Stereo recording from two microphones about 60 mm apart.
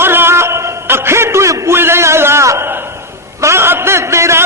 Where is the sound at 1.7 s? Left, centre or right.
Right.